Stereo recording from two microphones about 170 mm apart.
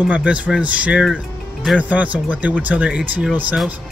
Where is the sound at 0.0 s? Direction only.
5° right (ahead or behind).